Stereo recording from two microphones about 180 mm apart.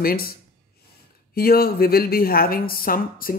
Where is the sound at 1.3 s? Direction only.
55° left (ahead or behind).